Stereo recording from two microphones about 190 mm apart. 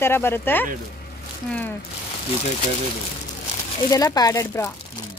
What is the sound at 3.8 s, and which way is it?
Speech, 20° left (ahead or behind).